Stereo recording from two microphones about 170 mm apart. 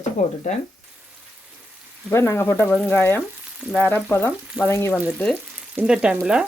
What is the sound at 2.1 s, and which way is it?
Speech, 15° left (ahead or behind).